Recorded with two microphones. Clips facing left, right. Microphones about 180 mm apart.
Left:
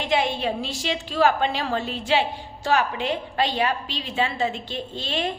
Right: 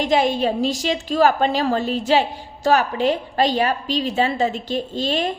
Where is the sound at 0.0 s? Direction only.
40° right (ahead or behind).